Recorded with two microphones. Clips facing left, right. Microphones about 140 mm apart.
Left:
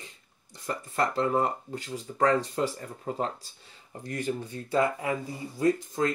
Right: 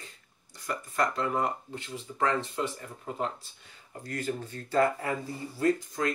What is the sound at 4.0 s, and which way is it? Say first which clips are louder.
Speech: left 2 dB; 20° left (ahead or behind).